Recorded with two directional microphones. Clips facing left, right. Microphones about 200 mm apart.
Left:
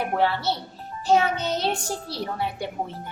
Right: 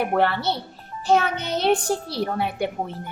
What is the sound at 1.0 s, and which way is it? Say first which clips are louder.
Speech: even; 60° right (ahead or behind).